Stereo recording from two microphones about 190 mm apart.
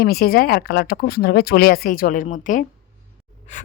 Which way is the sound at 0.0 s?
55° left (ahead or behind).